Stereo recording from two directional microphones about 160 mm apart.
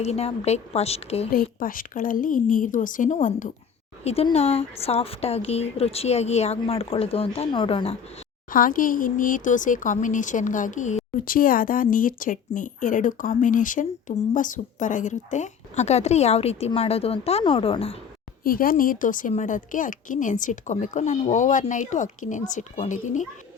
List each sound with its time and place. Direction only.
0.0 s speech: 40° left (ahead or behind)
1.3 s speech: 60° left (ahead or behind)
4.0 s speech: 40° left (ahead or behind)
8.4 s speech: 60° left (ahead or behind); by 18.0 s 40° left (ahead or behind)
18.4 s speech: 65° left (ahead or behind)